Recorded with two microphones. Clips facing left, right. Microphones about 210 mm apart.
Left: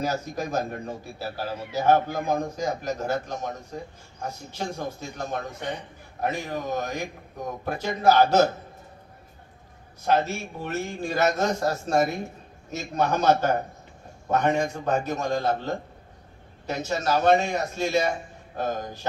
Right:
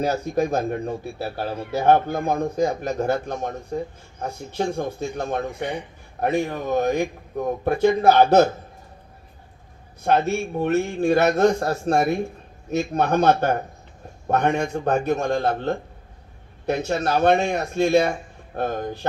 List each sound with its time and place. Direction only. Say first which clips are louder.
0.0 s a man's voice: right 6 dB; 60° right (ahead or behind)
10.0 s a man's voice: right 4 dB; 60° right (ahead or behind)